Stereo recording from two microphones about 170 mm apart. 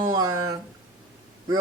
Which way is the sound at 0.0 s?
20° right (ahead or behind).